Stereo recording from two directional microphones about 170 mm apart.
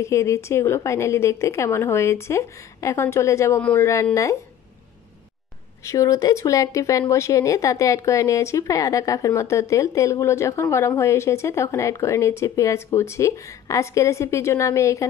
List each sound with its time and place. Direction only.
0.0 s speech: 15° left (ahead or behind)
5.9 s speech: 20° left (ahead or behind)